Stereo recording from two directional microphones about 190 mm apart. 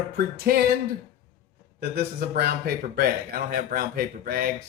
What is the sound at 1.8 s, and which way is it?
Speech, 55° right (ahead or behind).